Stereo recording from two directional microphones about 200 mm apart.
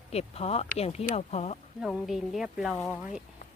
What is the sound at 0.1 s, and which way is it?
Speech, 30° left (ahead or behind).